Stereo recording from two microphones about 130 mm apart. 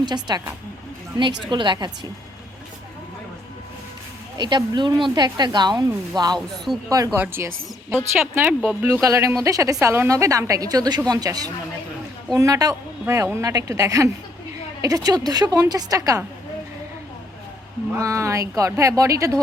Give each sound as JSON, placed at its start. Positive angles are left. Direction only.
{"t": 0.0, "sound": "speech", "side_deg": -35}
{"t": 4.4, "sound": "speech", "side_deg": -35}
{"t": 7.2, "sound": "a woman's voice", "side_deg": -20}
{"t": 17.9, "sound": "a woman's voice", "side_deg": -25}